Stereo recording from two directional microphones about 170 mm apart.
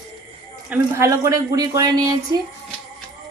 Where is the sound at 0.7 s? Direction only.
15° right (ahead or behind).